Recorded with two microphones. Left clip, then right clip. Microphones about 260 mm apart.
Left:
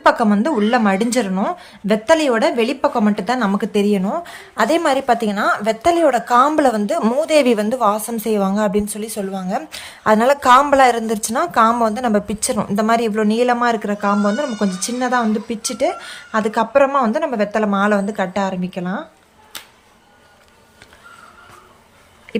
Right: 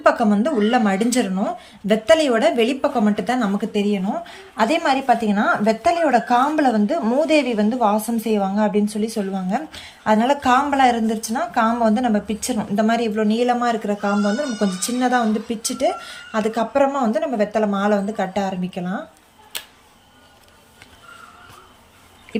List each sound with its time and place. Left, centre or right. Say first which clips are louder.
0.0 s a woman's voice: left 2 dB; centre
4.1 s a woman's voice: left 3 dB; left; by 19.0 s centre